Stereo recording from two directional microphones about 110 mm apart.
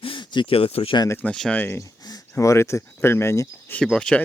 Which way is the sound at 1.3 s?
5° left (ahead or behind).